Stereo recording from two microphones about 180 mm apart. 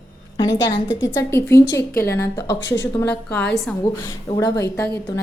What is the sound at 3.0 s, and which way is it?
Speech, 10° left (ahead or behind).